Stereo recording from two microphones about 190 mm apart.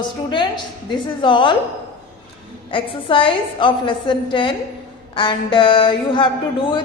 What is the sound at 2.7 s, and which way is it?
A woman's voice, 25° left (ahead or behind).